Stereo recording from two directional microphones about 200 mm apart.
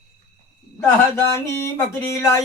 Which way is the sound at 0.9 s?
15° left (ahead or behind).